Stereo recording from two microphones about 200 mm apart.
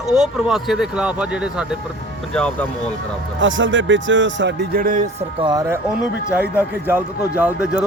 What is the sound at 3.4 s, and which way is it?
Speech, 70° right (ahead or behind).